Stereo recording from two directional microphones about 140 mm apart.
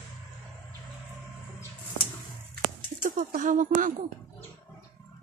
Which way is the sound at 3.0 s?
70° right (ahead or behind).